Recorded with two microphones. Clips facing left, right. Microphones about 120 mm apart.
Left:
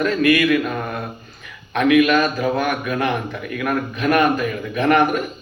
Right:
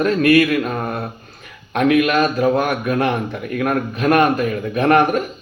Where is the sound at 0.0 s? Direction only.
40° right (ahead or behind).